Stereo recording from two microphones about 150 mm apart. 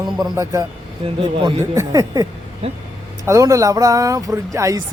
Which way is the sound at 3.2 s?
20° right (ahead or behind).